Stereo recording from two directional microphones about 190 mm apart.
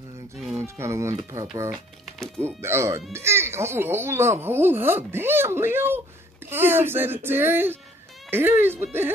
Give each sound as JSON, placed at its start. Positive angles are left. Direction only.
{"t": 0.6, "sound": "speech", "side_deg": -15}
{"t": 1.7, "sound": "speech", "side_deg": 5}
{"t": 2.4, "sound": "speech", "side_deg": -15}